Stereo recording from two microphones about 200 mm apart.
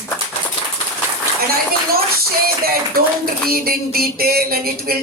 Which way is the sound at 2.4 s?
50° right (ahead or behind).